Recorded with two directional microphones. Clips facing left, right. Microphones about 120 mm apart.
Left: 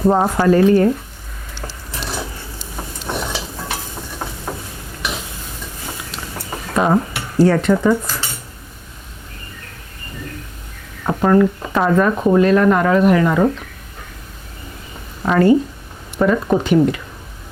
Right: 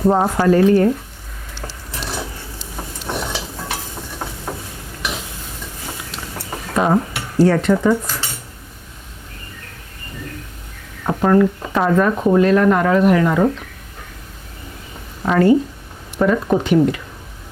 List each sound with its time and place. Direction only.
0.0 s speech: 30° left (ahead or behind)
1.5 s stir: 25° left (ahead or behind)
11.0 s speech: 25° left (ahead or behind)
15.2 s speech: 25° left (ahead or behind)